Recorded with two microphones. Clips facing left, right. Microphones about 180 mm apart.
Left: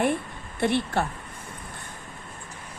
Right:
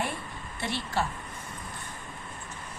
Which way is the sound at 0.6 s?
60° left (ahead or behind).